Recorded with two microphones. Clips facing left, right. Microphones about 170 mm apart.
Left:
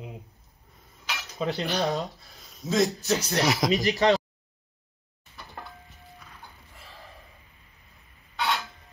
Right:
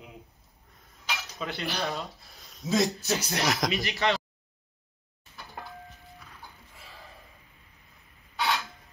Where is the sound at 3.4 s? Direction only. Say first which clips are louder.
Left 1 dB; centre (ahead or behind).